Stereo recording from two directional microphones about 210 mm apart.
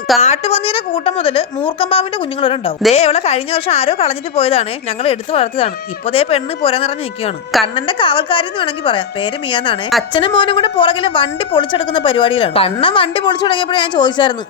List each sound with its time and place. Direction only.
0.2 s a woman's voice: 30° left (ahead or behind)